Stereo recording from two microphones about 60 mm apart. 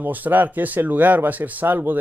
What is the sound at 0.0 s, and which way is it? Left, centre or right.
Speech, right.